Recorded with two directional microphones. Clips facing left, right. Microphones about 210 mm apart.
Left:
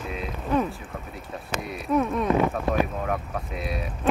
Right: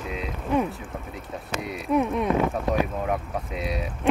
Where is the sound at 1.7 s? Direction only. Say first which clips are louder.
Right 1 dB; 15° right (ahead or behind).